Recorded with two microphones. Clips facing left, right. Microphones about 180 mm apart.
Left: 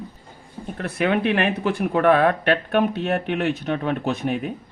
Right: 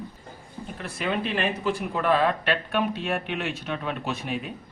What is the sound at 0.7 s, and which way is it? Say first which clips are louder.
Speech: left 7 dB; 60° left (ahead or behind).